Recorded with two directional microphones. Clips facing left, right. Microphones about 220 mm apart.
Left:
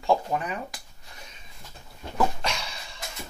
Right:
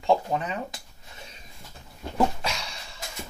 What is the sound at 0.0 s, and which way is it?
Speech, 20° right (ahead or behind).